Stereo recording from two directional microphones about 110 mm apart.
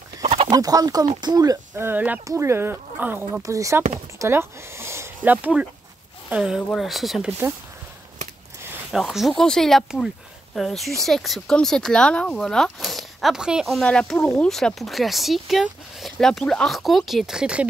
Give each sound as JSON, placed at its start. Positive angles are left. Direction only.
{"t": 0.2, "sound": "chicken", "side_deg": -70}
{"t": 0.5, "sound": "speech", "side_deg": -35}
{"t": 1.8, "sound": "speech", "side_deg": -15}
{"t": 7.2, "sound": "speech", "side_deg": -20}
{"t": 8.9, "sound": "speech", "side_deg": 0}
{"t": 13.8, "sound": "speech", "side_deg": 10}